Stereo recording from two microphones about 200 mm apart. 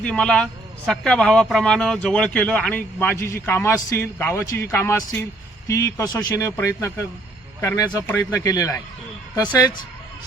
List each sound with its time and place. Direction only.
0.0 s a man's voice: 5° left (ahead or behind)